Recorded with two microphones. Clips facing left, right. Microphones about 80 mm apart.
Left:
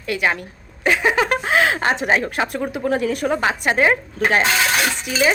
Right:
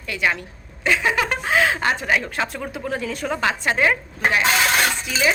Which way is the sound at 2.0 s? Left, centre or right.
Left.